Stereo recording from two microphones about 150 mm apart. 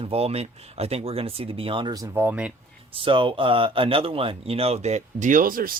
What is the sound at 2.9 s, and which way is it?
Speech, 35° right (ahead or behind).